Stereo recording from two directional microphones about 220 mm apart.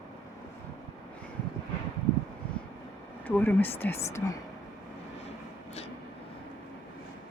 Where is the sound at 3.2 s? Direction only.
10° left (ahead or behind).